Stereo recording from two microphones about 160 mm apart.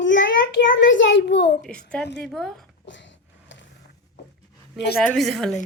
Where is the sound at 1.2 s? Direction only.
90° left.